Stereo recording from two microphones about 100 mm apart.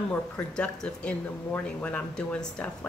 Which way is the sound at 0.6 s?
10° left (ahead or behind).